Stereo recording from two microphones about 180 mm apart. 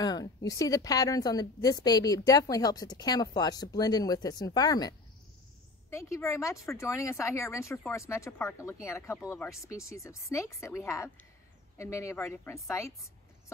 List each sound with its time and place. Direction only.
0.0 s a woman's voice: 20° left (ahead or behind)